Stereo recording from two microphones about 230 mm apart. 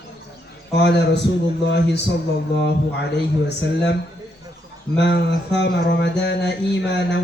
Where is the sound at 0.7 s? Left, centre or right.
Left.